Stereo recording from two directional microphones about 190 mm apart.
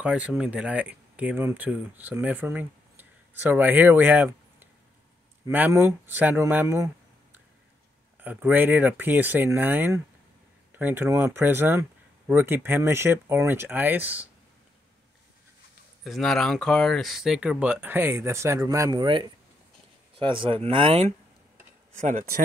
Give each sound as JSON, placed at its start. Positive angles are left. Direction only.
{"t": 0.0, "sound": "speech", "side_deg": -5}
{"t": 8.2, "sound": "speech", "side_deg": -10}
{"t": 16.0, "sound": "speech", "side_deg": 0}
{"t": 21.9, "sound": "speech", "side_deg": -40}